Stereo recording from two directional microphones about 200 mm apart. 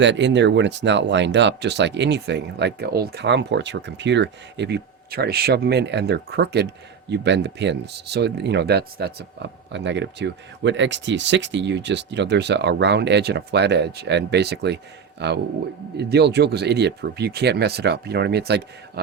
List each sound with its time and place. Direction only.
0.0 s speech: 65° right (ahead or behind)